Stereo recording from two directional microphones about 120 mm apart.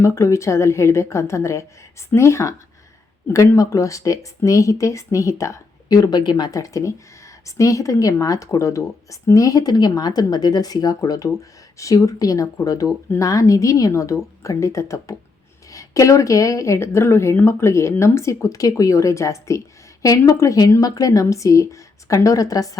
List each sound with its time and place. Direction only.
0.0 s speech: 25° left (ahead or behind)